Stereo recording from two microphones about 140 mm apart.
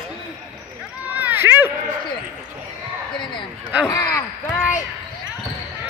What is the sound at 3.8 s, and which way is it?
Speech, 25° left (ahead or behind).